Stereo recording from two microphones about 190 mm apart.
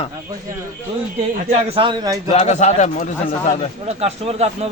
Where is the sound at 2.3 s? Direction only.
40° left (ahead or behind).